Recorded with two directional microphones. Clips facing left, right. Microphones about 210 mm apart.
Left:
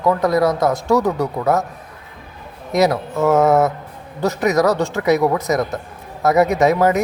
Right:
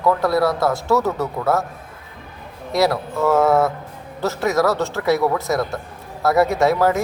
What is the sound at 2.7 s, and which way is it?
A man's voice, 20° left (ahead or behind).